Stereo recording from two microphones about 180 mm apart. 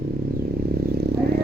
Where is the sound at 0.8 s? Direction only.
60° right (ahead or behind).